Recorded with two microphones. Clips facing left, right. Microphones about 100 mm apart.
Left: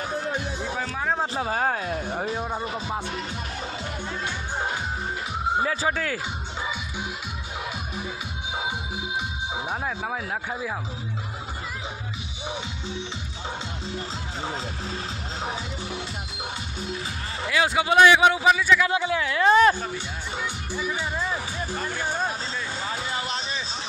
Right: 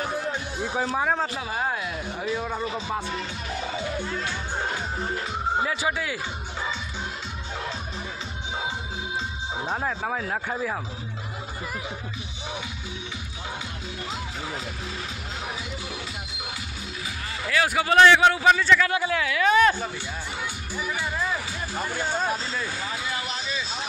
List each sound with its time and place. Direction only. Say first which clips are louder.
1.4 s speech: left 3 dB; 50° left (ahead or behind)
2.3 s speech: even; 30° left (ahead or behind)
5.7 s speech: left 1 dB; 40° left (ahead or behind)
17.5 s a man's voice: left 1 dB; 20° left (ahead or behind)
20.7 s music: even; 15° left (ahead or behind)
21.7 s speech: right 3 dB; 15° right (ahead or behind)
22.0 s a sound: right 1 dB; 15° left (ahead or behind)
22.8 s a sound: left 1 dB; 30° left (ahead or behind)